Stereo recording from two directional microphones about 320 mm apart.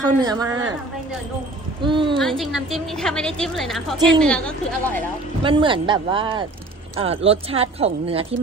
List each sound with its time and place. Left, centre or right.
0.0 s speech: centre
0.5 s a woman's voice: right
1.8 s speech: centre
2.1 s a woman's voice: centre
5.4 s speech: centre